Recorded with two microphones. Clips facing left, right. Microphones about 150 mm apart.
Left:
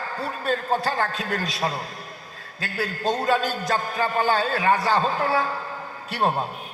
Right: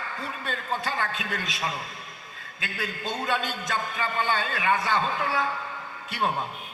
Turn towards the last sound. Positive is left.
turn(degrees=35)  # may be behind; listen again after turning